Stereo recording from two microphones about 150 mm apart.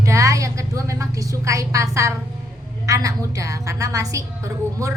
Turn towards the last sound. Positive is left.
turn(degrees=-20)  # may be behind; listen again after turning